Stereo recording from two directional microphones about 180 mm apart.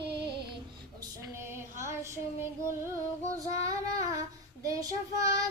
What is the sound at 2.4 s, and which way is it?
Female singing, 15° right (ahead or behind).